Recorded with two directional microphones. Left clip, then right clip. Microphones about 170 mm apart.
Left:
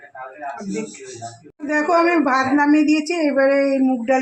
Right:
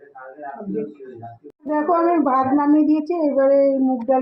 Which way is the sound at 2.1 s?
5° left (ahead or behind).